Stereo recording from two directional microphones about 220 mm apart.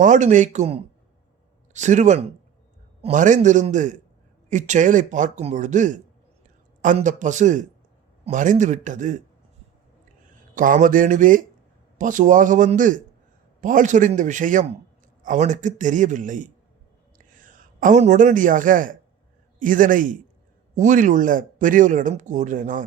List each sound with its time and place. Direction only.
0.0 s speech: 35° right (ahead or behind)
10.5 s speech: 35° right (ahead or behind)